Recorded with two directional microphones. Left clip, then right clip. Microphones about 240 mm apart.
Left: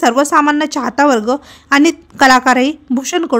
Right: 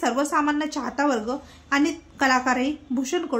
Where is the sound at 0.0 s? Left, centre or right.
Left.